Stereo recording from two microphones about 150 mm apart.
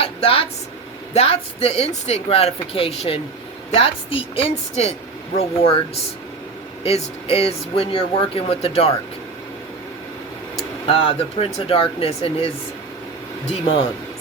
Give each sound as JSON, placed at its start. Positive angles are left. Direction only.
{"t": 0.0, "sound": "a woman's voice", "side_deg": 40}
{"t": 10.6, "sound": "speech", "side_deg": 40}